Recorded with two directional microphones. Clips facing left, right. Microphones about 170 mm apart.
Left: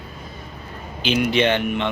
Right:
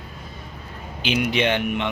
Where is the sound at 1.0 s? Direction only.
10° right (ahead or behind).